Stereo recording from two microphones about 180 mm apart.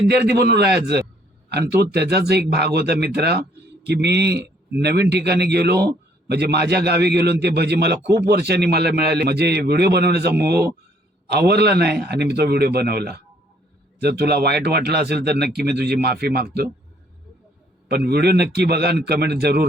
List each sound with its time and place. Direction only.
0.1 s a man's voice: 65° right (ahead or behind)
17.8 s a man's voice: 65° right (ahead or behind)